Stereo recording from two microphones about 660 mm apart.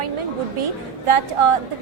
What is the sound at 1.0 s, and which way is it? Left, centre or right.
Speech, right.